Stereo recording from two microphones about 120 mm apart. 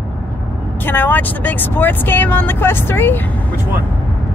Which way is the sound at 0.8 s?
15° left (ahead or behind).